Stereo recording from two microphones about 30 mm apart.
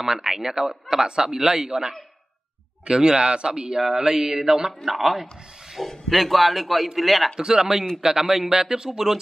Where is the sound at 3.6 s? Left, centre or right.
Centre.